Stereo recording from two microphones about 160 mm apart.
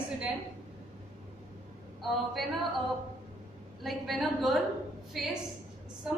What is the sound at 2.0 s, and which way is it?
Speech, centre (ahead or behind).